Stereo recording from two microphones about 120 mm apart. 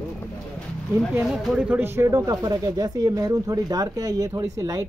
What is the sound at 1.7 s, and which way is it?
Speech, 20° right (ahead or behind).